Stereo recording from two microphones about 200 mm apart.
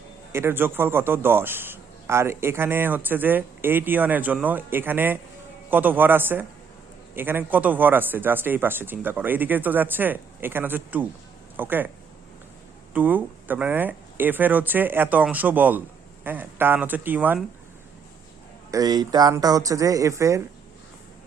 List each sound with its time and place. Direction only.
0.3 s a man's voice: 10° right (ahead or behind)
12.9 s a man's voice: 10° right (ahead or behind)
18.7 s a man's voice: 20° right (ahead or behind)